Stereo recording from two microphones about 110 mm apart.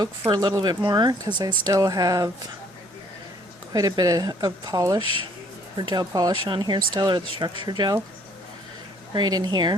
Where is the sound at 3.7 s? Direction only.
30° right (ahead or behind).